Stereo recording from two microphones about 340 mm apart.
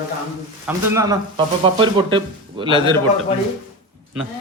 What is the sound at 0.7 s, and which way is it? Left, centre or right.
Speech, centre.